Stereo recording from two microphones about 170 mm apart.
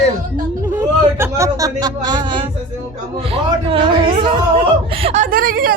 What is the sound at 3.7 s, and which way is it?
Speech, 30° right (ahead or behind).